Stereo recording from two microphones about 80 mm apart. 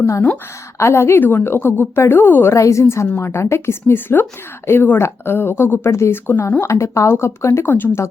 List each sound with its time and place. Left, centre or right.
0.0 s speech: left